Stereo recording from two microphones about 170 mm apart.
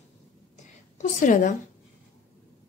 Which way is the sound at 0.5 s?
50° left (ahead or behind).